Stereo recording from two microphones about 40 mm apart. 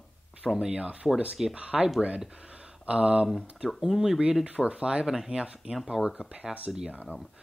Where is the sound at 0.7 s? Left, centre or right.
Right.